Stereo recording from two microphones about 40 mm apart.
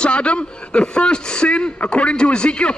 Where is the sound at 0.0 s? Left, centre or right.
Left.